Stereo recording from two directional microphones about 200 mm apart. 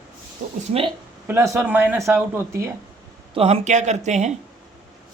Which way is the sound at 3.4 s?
35° right (ahead or behind).